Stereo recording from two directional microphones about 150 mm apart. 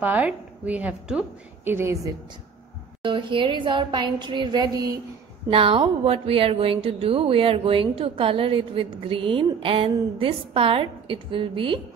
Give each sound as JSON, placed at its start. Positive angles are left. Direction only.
{"t": 0.0, "sound": "a woman's voice", "side_deg": -10}
{"t": 3.0, "sound": "speech", "side_deg": -35}
{"t": 5.5, "sound": "speech", "side_deg": -35}